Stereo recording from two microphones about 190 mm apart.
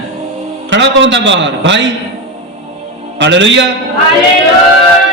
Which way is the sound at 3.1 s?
70° right (ahead or behind).